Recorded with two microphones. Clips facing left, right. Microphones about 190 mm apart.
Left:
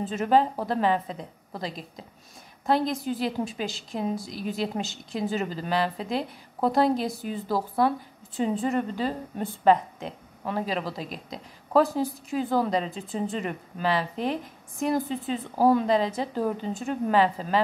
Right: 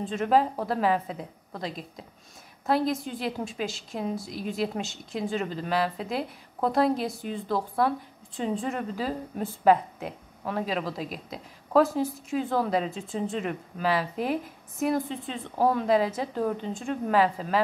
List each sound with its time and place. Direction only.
0.0 s a woman's voice: 5° left (ahead or behind)